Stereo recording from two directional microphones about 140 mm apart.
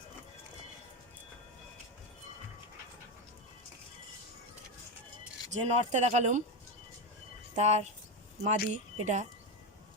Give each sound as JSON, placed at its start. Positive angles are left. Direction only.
{"t": 5.5, "sound": "speech", "side_deg": -55}
{"t": 7.5, "sound": "speech", "side_deg": -50}